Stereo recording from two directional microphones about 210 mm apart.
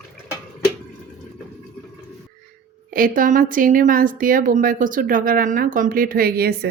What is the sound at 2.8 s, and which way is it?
A woman's voice, 40° right (ahead or behind).